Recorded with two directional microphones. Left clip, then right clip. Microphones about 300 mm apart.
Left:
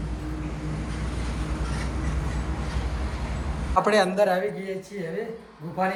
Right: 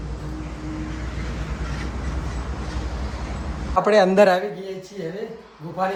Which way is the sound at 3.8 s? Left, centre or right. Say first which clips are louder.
Right 4 dB; centre.